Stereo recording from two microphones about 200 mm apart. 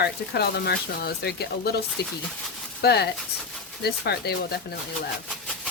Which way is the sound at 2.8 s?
55° left (ahead or behind).